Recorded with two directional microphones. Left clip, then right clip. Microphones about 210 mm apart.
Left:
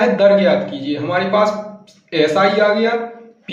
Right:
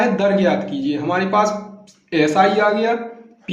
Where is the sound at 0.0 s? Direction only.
35° right (ahead or behind).